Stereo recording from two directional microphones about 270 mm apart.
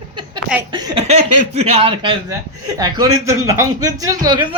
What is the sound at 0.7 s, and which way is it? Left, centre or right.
A man's voice, centre.